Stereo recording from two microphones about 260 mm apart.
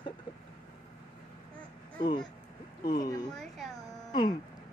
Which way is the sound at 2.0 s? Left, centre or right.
Centre.